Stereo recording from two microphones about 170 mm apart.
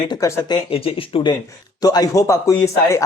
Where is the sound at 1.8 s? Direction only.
20° left (ahead or behind).